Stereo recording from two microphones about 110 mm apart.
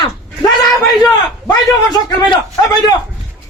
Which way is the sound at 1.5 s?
35° left (ahead or behind).